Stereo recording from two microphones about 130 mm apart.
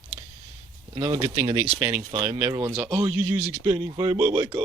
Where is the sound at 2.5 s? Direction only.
10° right (ahead or behind).